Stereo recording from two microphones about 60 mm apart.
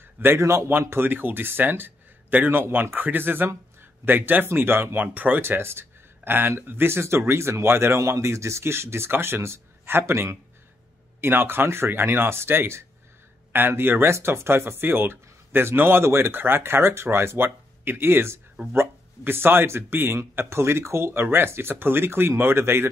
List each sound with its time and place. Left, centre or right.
0.0 s a sound: right
0.4 s speech: right
0.7 s speech: right
5.4 s speech: right